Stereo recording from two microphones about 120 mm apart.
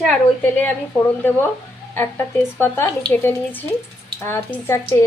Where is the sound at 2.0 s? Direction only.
20° left (ahead or behind).